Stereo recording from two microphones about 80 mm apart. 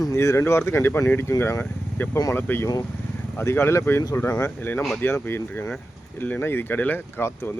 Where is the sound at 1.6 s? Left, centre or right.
Left.